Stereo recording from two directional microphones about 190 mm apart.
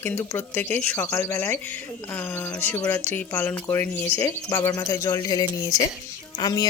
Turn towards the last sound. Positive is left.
turn(degrees=20)  # may be behind; listen again after turning